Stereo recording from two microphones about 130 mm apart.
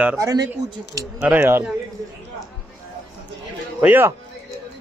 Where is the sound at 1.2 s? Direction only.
15° right (ahead or behind).